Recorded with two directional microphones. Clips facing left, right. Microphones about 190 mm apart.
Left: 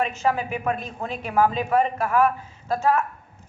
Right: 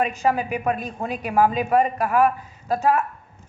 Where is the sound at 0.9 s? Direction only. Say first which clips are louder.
Right 1 dB; 15° right (ahead or behind).